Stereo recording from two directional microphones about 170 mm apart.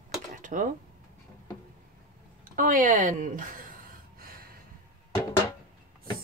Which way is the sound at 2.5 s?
50° right (ahead or behind).